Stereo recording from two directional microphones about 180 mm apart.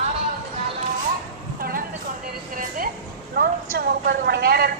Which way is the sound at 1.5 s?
55° right (ahead or behind).